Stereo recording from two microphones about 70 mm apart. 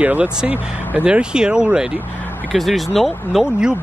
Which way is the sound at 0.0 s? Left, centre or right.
Right.